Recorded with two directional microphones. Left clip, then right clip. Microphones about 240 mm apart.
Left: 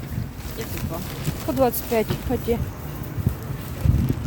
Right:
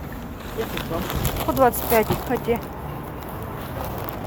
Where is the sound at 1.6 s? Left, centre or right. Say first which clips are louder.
Right 3 dB; centre.